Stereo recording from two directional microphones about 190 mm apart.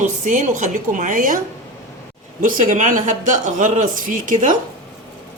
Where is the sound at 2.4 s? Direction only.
45° right (ahead or behind).